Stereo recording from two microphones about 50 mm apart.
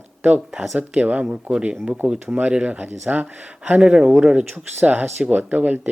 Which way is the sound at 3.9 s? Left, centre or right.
Centre.